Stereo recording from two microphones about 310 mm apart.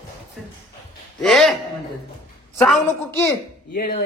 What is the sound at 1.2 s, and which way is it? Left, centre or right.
Speech, centre.